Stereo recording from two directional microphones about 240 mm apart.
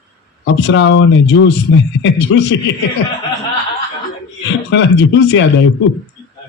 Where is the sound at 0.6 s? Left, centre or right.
Left.